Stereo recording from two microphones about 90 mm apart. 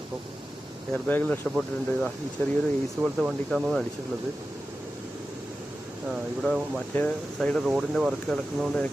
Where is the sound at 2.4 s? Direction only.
20° left (ahead or behind).